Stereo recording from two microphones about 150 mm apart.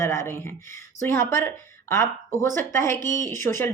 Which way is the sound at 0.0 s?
20° left (ahead or behind).